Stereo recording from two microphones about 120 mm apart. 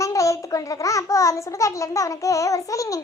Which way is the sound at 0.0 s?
25° left (ahead or behind).